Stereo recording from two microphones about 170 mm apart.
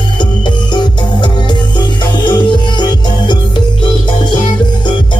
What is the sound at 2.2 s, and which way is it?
Music, 25° left (ahead or behind).